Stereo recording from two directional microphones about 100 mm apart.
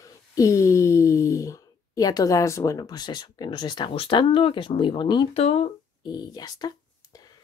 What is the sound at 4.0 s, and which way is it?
Speech, 60° left (ahead or behind).